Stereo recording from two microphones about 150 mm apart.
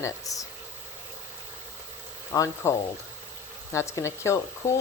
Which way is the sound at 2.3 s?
20° left (ahead or behind).